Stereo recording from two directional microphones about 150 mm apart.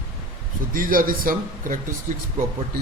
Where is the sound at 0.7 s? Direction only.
70° right (ahead or behind).